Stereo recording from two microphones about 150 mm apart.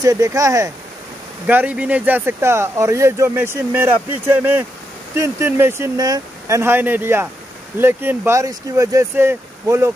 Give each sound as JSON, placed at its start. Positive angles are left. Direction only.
{"t": 0.0, "sound": "speech", "side_deg": -20}
{"t": 1.5, "sound": "speech", "side_deg": -10}